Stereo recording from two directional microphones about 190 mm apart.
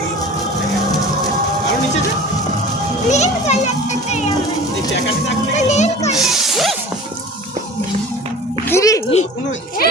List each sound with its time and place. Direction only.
3.1 s children playing: 35° left (ahead or behind)
5.5 s children playing: 35° left (ahead or behind)
6.1 s music: centre (ahead or behind)
8.6 s music: 15° left (ahead or behind)
9.0 s a sound: 35° left (ahead or behind)